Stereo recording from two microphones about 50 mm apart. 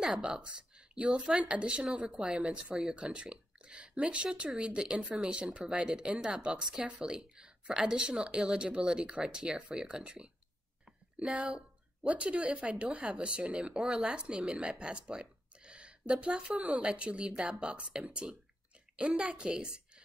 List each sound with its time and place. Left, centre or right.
0.0 s speech: centre
17.3 s speech: centre
17.6 s speech: right